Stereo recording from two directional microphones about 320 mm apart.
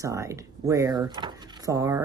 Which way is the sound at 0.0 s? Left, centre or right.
Centre.